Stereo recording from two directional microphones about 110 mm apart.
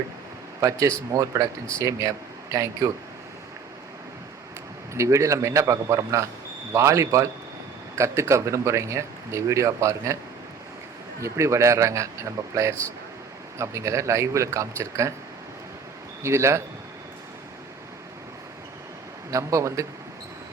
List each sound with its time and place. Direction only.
0.6 s speech: 30° right (ahead or behind)
4.9 s speech: 30° right (ahead or behind)
11.2 s speech: 25° right (ahead or behind)
16.2 s speech: 25° right (ahead or behind)
19.3 s speech: 30° right (ahead or behind)